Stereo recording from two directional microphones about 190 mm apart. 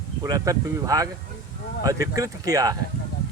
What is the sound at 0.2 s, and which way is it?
Speech, 20° right (ahead or behind).